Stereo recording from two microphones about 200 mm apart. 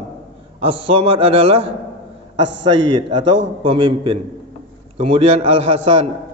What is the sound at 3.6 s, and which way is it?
A man's voice, 25° right (ahead or behind).